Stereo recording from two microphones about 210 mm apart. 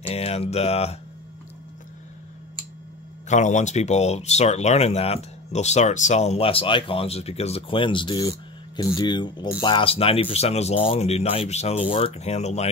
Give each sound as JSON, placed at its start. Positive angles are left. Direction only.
{"t": 0.0, "sound": "speech", "side_deg": 30}
{"t": 3.3, "sound": "speech", "side_deg": 35}